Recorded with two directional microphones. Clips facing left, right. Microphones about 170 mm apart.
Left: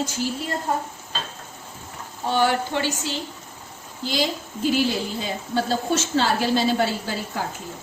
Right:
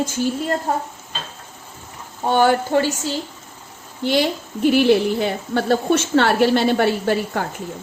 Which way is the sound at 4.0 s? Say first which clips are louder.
Right 6 dB; 60° right (ahead or behind).